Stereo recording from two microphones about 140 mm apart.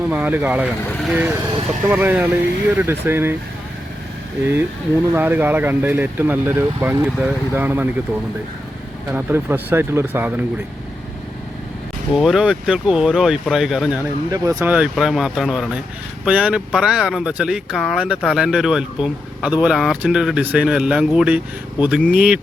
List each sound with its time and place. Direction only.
0.1 s speech: 10° right (ahead or behind)
5.1 s speech: 15° right (ahead or behind)
12.1 s speech: centre (ahead or behind)
14.3 s speech: 25° right (ahead or behind)
14.7 s speech: 5° right (ahead or behind)